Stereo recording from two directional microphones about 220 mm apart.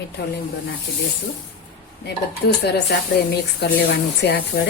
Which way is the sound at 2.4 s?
45° left (ahead or behind).